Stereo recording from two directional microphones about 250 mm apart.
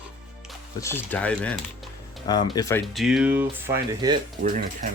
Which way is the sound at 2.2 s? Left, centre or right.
Centre.